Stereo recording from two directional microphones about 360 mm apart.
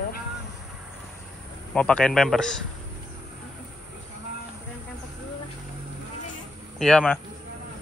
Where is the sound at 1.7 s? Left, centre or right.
Centre.